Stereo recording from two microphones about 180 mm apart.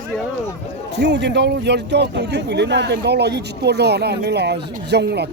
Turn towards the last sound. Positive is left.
turn(degrees=-70)  # may be behind; listen again after turning